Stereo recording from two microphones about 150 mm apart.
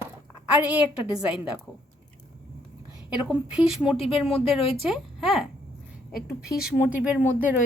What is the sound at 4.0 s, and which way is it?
Speech, 40° left (ahead or behind).